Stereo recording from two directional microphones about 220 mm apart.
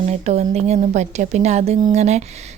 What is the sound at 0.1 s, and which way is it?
Speech, 30° right (ahead or behind).